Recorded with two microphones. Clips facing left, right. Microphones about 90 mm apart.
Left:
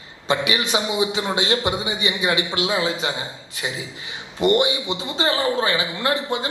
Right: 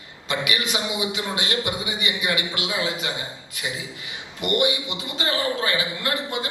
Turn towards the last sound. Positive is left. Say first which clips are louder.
# left 4 dB
turn(degrees=25)  # may be behind; listen again after turning